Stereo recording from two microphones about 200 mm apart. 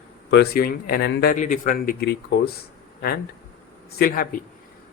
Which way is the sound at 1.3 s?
40° left (ahead or behind).